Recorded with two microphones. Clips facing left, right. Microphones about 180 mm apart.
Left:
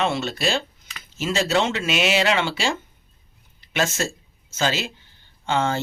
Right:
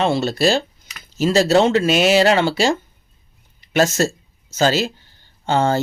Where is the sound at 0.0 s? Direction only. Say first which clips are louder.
Right 6 dB; 35° right (ahead or behind).